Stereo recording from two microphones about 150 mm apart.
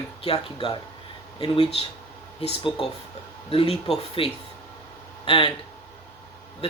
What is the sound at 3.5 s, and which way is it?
Speech, 40° left (ahead or behind).